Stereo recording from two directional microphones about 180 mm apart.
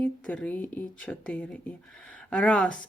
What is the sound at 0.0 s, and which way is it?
A woman's voice, 5° left (ahead or behind).